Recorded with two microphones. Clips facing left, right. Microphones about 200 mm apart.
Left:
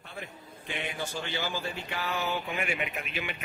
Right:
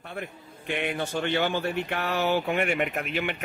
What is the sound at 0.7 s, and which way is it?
Speech, 60° right (ahead or behind).